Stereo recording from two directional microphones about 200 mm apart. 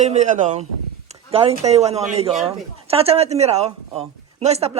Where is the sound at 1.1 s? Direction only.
30° right (ahead or behind).